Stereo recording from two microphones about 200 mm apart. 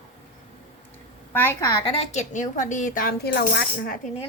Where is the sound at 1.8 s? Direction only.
30° left (ahead or behind); by 4.0 s 50° left (ahead or behind).